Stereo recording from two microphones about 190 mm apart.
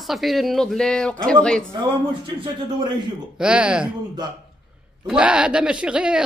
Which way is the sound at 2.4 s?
25° right (ahead or behind).